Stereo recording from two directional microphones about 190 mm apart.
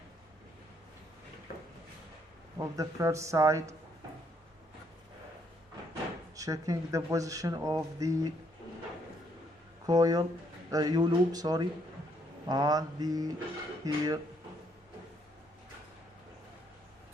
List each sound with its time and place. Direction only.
2.6 s speech: 15° right (ahead or behind)
6.3 s speech: 20° right (ahead or behind)
9.8 s speech: 20° right (ahead or behind)